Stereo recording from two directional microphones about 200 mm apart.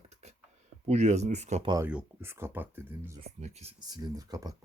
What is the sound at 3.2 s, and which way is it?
Speech, 30° right (ahead or behind).